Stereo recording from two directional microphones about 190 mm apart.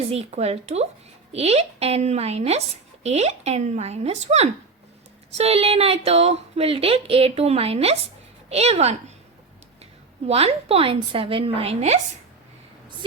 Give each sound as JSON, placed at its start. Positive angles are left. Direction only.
{"t": 0.1, "sound": "speech", "side_deg": -35}
{"t": 10.2, "sound": "speech", "side_deg": -30}